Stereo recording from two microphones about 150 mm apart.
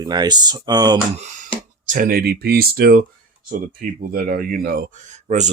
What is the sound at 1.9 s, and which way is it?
Speech, 70° right (ahead or behind).